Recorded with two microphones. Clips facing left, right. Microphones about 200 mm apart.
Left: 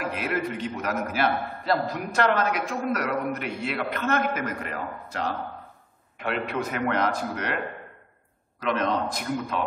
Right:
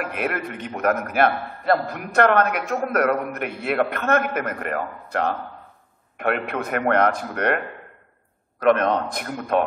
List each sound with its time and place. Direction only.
0.0 s a man's voice: 55° right (ahead or behind)